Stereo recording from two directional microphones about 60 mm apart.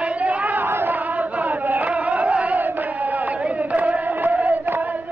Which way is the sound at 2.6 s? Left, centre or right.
Right.